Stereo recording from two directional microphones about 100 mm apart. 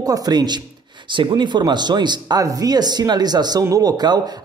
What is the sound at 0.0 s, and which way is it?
Speech, 40° right (ahead or behind).